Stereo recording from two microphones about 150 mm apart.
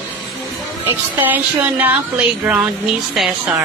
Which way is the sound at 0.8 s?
10° right (ahead or behind).